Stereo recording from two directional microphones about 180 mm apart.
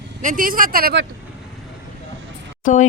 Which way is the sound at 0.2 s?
45° right (ahead or behind).